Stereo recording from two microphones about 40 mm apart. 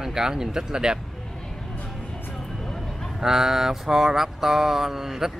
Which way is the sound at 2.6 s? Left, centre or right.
Centre.